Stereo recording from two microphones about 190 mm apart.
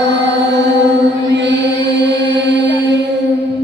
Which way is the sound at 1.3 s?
65° right (ahead or behind).